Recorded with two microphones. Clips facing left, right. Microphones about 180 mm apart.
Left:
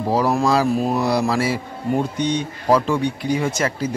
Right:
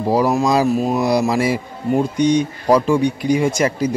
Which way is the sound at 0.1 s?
10° right (ahead or behind).